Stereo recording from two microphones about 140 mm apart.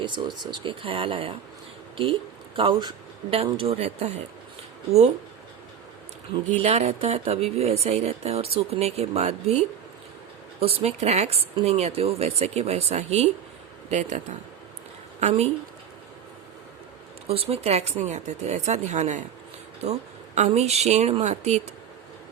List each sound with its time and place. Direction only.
0.0 s speech: 35° right (ahead or behind)
2.6 s speech: 35° right (ahead or behind); by 5.1 s 50° right (ahead or behind)
6.5 s speech: 55° right (ahead or behind)
17.2 s speech: 45° right (ahead or behind)